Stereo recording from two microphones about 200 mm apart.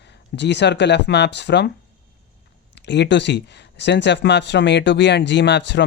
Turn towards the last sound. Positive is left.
turn(degrees=60)  # may be behind; listen again after turning